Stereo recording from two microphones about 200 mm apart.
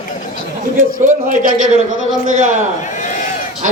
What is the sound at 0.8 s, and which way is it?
Speech, 40° right (ahead or behind).